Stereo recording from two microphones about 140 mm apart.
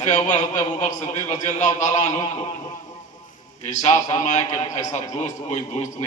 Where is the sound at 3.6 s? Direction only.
55° left (ahead or behind).